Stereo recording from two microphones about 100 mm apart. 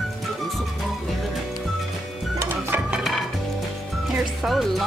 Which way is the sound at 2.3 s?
20° right (ahead or behind).